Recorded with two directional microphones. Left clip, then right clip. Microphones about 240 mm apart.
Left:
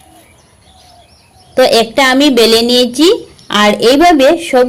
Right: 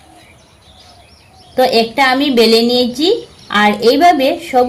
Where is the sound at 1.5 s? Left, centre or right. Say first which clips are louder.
Left 4 dB; left.